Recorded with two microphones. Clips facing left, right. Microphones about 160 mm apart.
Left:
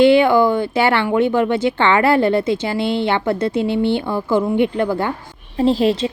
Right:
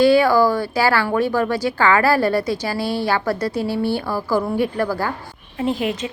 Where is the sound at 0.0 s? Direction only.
20° left (ahead or behind).